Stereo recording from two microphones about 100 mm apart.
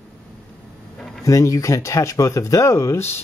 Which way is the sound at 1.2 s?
30° left (ahead or behind).